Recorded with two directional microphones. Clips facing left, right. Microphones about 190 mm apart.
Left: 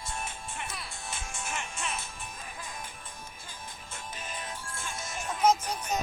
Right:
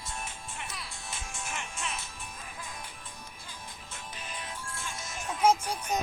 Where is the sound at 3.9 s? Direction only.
45° left (ahead or behind).